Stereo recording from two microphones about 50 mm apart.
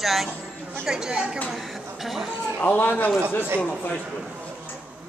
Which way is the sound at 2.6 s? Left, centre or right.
Left.